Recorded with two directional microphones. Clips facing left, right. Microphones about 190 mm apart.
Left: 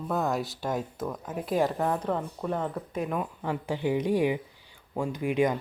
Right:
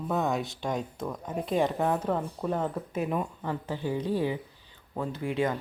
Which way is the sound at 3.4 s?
15° left (ahead or behind).